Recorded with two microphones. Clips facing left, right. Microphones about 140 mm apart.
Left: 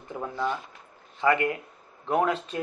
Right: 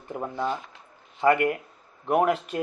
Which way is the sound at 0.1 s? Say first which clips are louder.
Right 1 dB; 15° right (ahead or behind).